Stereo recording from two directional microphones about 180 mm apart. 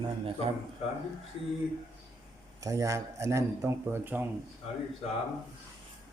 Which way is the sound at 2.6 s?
20° right (ahead or behind).